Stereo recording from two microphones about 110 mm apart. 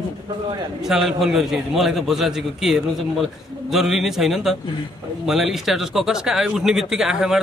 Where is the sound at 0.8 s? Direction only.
5° right (ahead or behind).